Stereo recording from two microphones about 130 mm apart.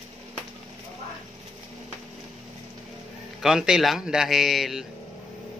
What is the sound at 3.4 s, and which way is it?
Speech, 5° right (ahead or behind).